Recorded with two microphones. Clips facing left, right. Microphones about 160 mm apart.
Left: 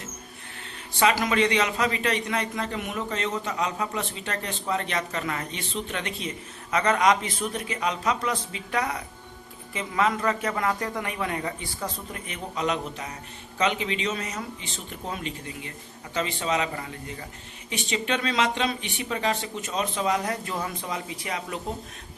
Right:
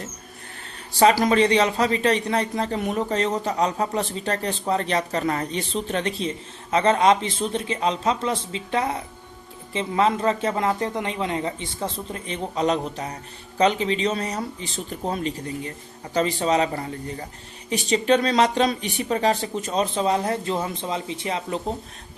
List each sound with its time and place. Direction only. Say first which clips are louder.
0.9 s a man's voice: right 5 dB; 35° right (ahead or behind)